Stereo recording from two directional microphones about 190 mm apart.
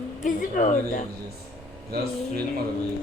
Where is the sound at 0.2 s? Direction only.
40° left (ahead or behind).